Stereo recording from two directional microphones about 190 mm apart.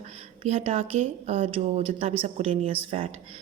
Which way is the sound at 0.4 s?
35° right (ahead or behind).